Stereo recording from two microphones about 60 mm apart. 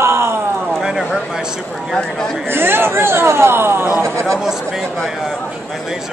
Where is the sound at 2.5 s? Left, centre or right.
Right.